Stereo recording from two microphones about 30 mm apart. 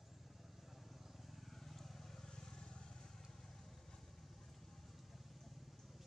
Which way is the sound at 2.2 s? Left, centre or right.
Left.